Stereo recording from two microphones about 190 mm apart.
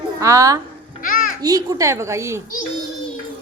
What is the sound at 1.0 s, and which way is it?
Music, 45° left (ahead or behind).